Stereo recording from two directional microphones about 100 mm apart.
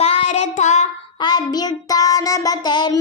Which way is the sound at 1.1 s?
45° left (ahead or behind).